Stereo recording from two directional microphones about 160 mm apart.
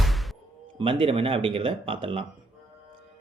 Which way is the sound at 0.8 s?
35° right (ahead or behind).